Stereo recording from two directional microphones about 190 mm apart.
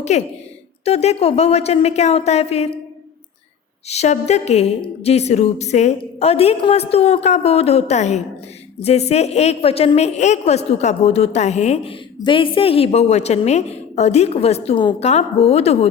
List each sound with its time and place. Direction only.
0.0 s a woman's voice: 35° left (ahead or behind)
3.8 s a woman's voice: 35° left (ahead or behind)